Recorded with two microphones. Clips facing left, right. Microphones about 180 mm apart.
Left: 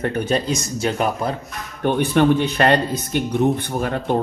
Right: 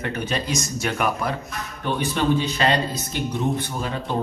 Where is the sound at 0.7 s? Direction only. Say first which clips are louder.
Left 3 dB; 30° left (ahead or behind).